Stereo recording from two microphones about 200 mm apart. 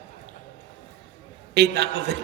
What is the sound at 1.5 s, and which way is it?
Speech, 55° right (ahead or behind).